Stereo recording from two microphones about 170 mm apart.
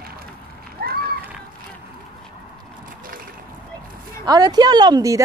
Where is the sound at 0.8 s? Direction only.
70° right (ahead or behind).